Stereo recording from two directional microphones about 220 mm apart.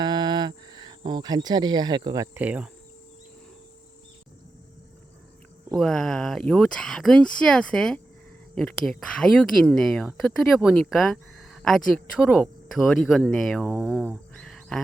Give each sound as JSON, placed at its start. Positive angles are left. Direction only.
{"t": 0.0, "sound": "speech", "side_deg": -20}
{"t": 5.7, "sound": "speech", "side_deg": 0}